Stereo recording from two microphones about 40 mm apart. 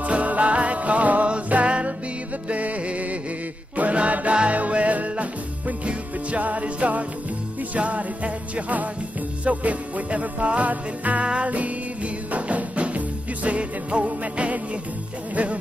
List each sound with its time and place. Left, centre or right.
0.0 s music: right
3.7 s chant: right
4.4 s music: right